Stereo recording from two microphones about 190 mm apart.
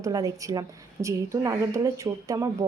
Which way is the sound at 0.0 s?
15° right (ahead or behind).